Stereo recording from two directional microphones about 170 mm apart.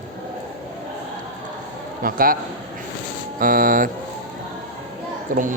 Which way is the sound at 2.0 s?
55° right (ahead or behind).